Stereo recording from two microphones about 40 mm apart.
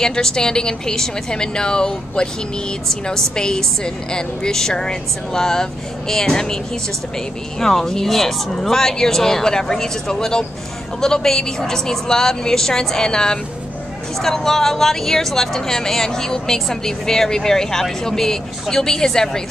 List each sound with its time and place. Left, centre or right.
0.0 s a woman's voice: centre
7.6 s a woman's voice: centre
14.2 s a woman's voice: centre